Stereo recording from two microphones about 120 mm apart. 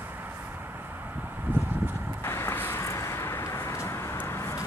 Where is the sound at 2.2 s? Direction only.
20° left (ahead or behind).